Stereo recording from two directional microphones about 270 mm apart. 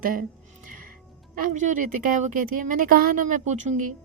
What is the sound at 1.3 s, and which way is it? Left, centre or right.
A woman's voice, right.